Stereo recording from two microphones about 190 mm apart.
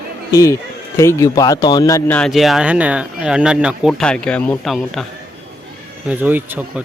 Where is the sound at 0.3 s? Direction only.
20° left (ahead or behind); by 5.0 s centre (ahead or behind).